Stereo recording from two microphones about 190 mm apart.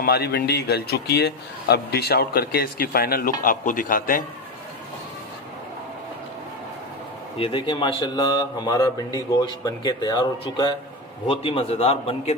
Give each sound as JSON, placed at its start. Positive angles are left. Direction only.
{"t": 0.0, "sound": "a man's voice", "side_deg": 55}
{"t": 7.3, "sound": "a man's voice", "side_deg": 30}